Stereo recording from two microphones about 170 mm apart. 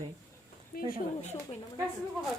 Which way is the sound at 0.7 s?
60° left (ahead or behind).